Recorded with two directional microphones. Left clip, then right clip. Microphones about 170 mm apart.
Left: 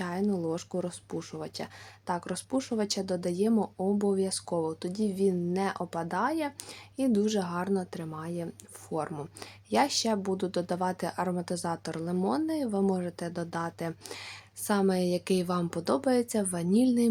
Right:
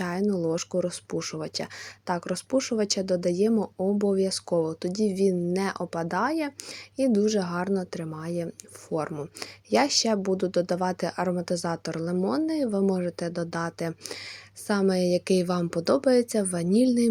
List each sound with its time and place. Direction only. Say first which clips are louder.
0.0 s speech: right 4 dB; 20° right (ahead or behind)